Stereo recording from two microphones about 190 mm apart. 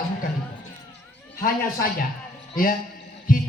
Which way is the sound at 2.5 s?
45° left (ahead or behind).